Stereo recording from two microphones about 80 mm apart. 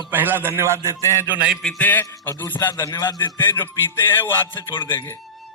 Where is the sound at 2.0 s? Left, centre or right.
Left.